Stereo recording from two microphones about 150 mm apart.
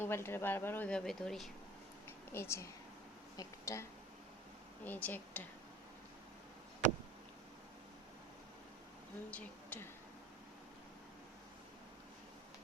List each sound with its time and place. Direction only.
0.0 s speech: 15° left (ahead or behind)
2.0 s a sound: 15° left (ahead or behind)
3.3 s speech: 20° left (ahead or behind)
9.3 s speech: 10° left (ahead or behind)